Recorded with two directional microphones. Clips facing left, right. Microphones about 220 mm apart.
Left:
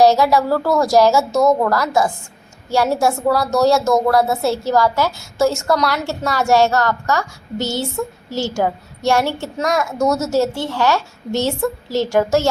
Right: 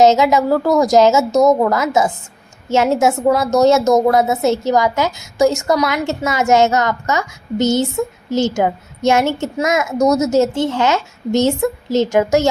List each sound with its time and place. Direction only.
0.0 s a woman's voice: 20° right (ahead or behind)